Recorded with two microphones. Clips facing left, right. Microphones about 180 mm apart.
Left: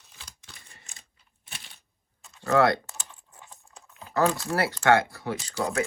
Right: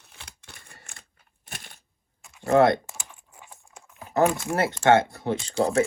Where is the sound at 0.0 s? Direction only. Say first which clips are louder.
Right 3 dB; 60° right (ahead or behind).